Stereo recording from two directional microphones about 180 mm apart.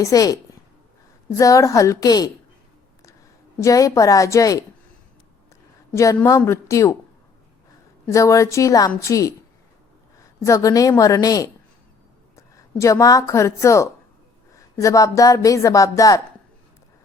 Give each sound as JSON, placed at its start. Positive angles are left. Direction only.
{"t": 0.0, "sound": "a woman's voice", "side_deg": 20}
{"t": 3.6, "sound": "a woman's voice", "side_deg": 20}
{"t": 5.9, "sound": "speech", "side_deg": 15}
{"t": 8.1, "sound": "a woman's voice", "side_deg": 20}